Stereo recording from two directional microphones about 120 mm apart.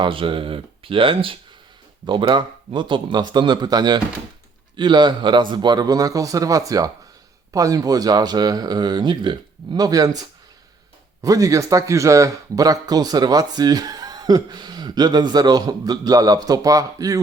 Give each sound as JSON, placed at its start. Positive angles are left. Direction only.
{"t": 0.0, "sound": "speech", "side_deg": -45}